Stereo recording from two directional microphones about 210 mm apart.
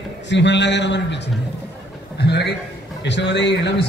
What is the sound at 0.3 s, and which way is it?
A man's voice, 55° left (ahead or behind).